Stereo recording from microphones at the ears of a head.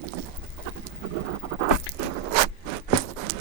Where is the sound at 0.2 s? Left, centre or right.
Right.